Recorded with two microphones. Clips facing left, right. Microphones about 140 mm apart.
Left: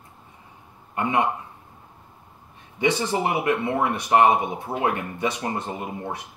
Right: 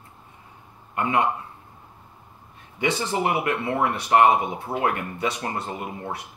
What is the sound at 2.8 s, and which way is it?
Speech, 20° left (ahead or behind).